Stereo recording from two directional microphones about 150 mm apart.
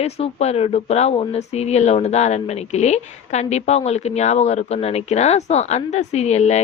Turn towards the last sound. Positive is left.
turn(degrees=45)  # may be behind; listen again after turning